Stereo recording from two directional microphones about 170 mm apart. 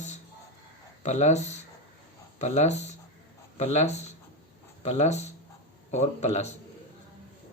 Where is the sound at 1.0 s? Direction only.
40° left (ahead or behind).